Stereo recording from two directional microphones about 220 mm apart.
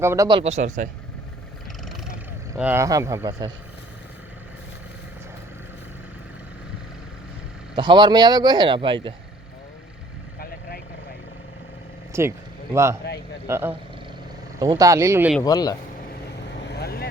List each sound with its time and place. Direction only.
0.0 s speech: 15° right (ahead or behind); by 0.9 s 30° right (ahead or behind)
2.6 s speech: 10° right (ahead or behind)
7.8 s speech: 20° right (ahead or behind)
12.1 s speech: 10° right (ahead or behind)
15.4 s speech: 15° left (ahead or behind)
16.3 s vehicle: 50° left (ahead or behind)